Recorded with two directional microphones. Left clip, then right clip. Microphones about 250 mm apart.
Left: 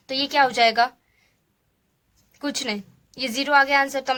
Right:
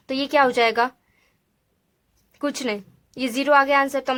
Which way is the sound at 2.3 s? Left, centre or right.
Right.